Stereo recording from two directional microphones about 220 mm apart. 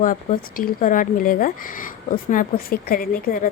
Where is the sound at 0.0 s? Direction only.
40° left (ahead or behind).